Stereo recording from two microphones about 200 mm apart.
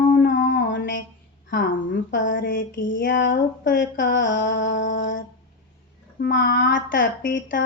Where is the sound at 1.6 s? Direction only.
45° left (ahead or behind).